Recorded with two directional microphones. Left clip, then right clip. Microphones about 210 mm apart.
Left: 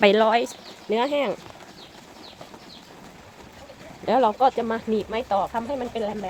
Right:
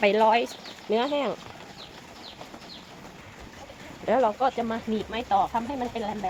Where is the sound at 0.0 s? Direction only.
40° left (ahead or behind); by 1.4 s 20° left (ahead or behind).